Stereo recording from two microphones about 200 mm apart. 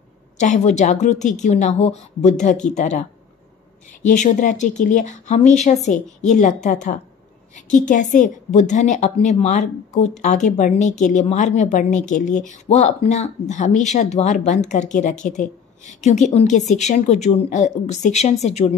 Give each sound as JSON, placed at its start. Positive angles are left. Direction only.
{"t": 0.4, "sound": "a woman's voice", "side_deg": 35}
{"t": 4.1, "sound": "a woman's voice", "side_deg": 40}